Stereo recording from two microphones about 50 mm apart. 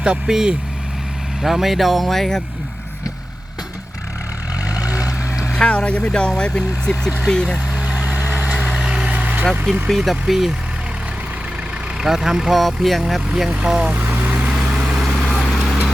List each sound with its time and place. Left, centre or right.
0.3 s speech: centre
4.8 s vehicle: right
5.5 s speech: left
8.0 s vehicle: right
8.8 s vehicle: centre
9.0 s vehicle: right
9.9 s speech: centre
11.9 s speech: centre
13.2 s speech: centre
13.9 s speech: right
14.3 s vehicle: right
15.0 s vehicle: centre